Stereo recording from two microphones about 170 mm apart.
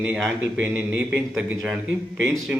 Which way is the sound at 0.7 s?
10° right (ahead or behind).